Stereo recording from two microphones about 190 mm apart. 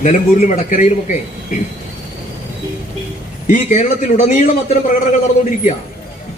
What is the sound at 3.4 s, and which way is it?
A man's voice, 40° left (ahead or behind).